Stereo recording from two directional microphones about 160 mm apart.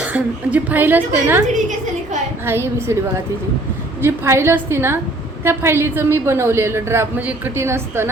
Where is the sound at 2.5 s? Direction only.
15° right (ahead or behind).